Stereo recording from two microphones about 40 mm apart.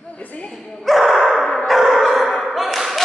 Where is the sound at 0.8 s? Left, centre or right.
Centre.